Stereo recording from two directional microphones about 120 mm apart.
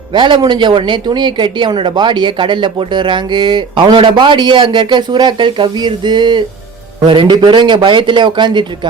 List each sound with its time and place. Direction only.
0.1 s speech: 40° right (ahead or behind)